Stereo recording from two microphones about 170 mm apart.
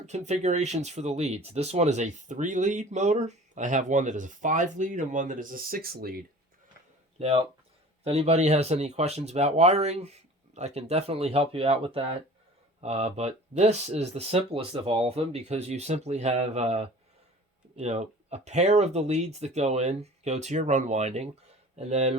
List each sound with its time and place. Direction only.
0.0 s speech: 40° right (ahead or behind); by 6.1 s 60° right (ahead or behind)
7.2 s speech: 35° right (ahead or behind)